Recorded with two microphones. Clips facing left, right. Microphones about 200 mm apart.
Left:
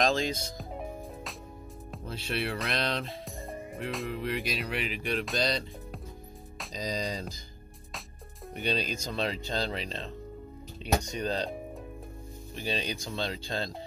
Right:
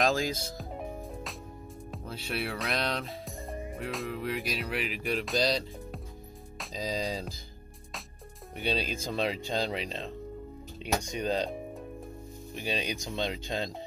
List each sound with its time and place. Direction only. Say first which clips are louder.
0.0 s music: even; 5° right (ahead or behind)
1.9 s speech: left 1 dB; 5° right (ahead or behind)
6.6 s speech: right 1 dB; centre (ahead or behind)
8.5 s speech: even; 5° right (ahead or behind)
12.5 s speech: even; 10° right (ahead or behind)